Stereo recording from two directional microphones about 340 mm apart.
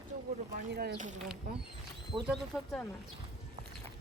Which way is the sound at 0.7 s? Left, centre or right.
Right.